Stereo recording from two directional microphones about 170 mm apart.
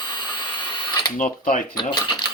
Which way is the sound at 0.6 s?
25° left (ahead or behind).